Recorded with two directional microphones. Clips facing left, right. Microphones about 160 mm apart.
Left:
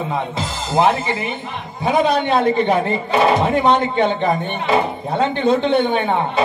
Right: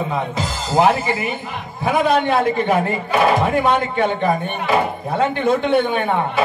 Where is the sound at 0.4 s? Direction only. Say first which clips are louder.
Right 1 dB; 25° left (ahead or behind).